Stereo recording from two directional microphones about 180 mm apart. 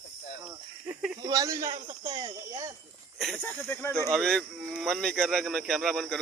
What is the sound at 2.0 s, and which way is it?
Speech, 35° right (ahead or behind).